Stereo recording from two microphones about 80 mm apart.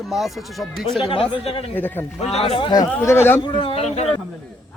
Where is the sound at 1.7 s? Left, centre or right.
Left.